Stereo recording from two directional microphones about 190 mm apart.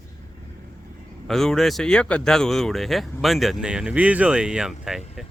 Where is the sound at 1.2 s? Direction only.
Centre (ahead or behind).